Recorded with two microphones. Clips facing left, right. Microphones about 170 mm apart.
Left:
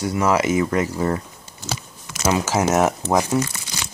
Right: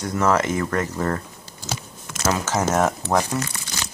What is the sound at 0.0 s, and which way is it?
Speech, 10° left (ahead or behind).